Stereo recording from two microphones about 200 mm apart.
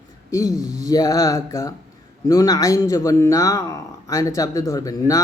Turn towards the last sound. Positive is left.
turn(degrees=15)  # may be behind; listen again after turning